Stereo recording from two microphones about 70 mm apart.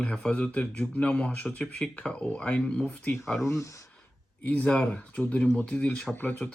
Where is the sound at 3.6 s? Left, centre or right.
Left.